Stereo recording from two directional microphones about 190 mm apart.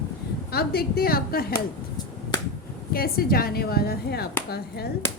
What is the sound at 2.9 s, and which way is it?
A woman's voice, 50° left (ahead or behind).